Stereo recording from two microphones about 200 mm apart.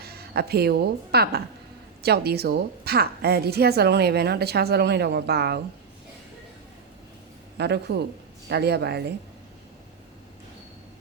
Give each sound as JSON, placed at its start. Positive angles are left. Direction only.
{"t": 0.0, "sound": "a woman's voice", "side_deg": -50}
{"t": 7.6, "sound": "speech", "side_deg": -55}